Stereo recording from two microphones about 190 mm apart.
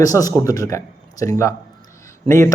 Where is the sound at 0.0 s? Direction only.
20° left (ahead or behind).